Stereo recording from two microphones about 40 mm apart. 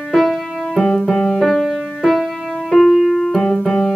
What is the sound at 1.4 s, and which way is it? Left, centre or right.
Music, centre.